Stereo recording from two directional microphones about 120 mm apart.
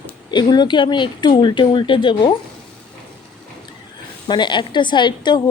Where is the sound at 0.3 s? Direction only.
40° left (ahead or behind).